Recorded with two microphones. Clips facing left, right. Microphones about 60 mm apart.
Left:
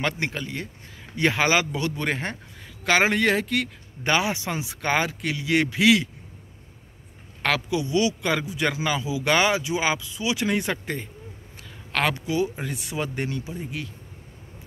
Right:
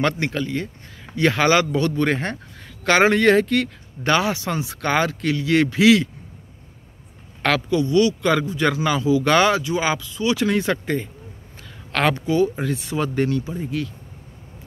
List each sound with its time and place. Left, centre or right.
0.0 s a man's voice: centre
7.4 s a man's voice: centre